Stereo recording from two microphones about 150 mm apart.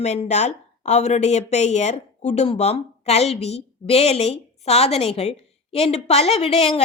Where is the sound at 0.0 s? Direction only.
50° left (ahead or behind).